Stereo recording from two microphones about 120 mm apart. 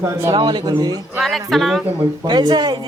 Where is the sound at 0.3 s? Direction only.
40° right (ahead or behind).